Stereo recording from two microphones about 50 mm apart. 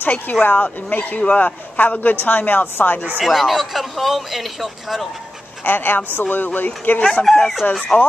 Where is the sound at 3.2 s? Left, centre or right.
Centre.